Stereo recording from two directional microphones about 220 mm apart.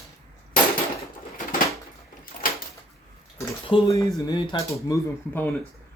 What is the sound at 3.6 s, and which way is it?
Speech, 20° left (ahead or behind).